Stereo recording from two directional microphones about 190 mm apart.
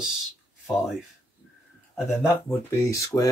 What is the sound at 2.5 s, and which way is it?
Speech, 15° left (ahead or behind).